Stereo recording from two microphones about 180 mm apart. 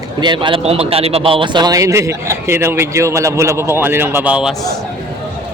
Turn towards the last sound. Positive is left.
turn(degrees=-5)  # may be behind; listen again after turning